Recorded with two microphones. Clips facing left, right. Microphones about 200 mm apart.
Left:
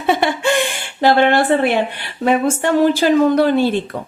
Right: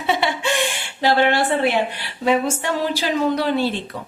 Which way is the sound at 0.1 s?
50° left (ahead or behind).